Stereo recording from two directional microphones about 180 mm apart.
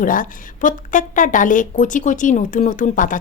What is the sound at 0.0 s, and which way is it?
Speech, 50° left (ahead or behind).